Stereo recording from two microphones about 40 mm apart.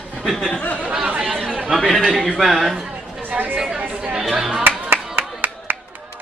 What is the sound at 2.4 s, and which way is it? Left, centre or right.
Speech, centre.